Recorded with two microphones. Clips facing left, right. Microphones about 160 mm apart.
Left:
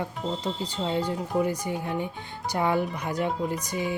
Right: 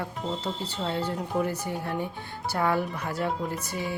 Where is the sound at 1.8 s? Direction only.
15° left (ahead or behind).